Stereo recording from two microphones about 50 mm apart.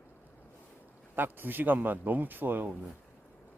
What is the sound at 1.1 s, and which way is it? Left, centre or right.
A man's voice, right.